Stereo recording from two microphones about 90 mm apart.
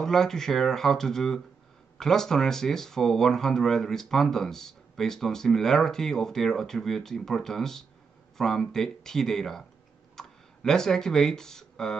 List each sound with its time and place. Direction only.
0.0 s speech: 5° left (ahead or behind)